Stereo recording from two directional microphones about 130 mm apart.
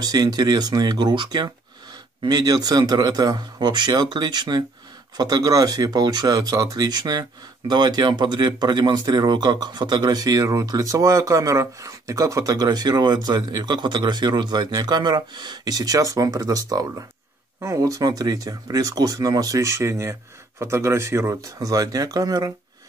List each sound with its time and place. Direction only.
0.0 s speech: 30° right (ahead or behind)